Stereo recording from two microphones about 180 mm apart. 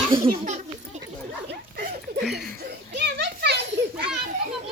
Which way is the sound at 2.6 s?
70° right (ahead or behind).